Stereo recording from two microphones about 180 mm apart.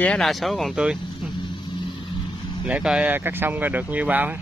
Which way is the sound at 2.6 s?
5° right (ahead or behind).